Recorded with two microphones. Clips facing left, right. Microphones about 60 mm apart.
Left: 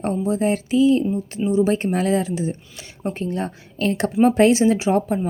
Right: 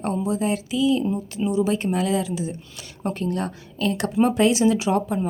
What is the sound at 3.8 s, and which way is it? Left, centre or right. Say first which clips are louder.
Speech: left 3 dB; left.